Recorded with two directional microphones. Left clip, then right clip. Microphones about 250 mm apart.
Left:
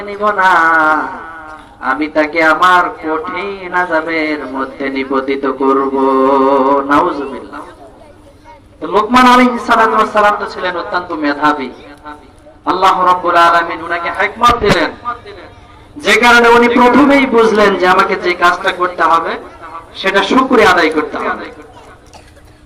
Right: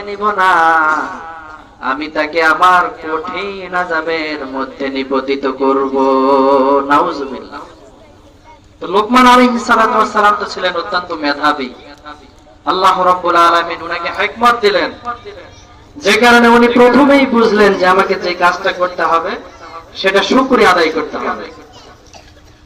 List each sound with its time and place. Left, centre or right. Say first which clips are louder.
0.0 s a man's voice: left 1 dB; centre
8.8 s a man's voice: even; centre